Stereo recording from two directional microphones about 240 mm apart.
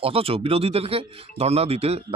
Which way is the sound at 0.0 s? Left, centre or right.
Right.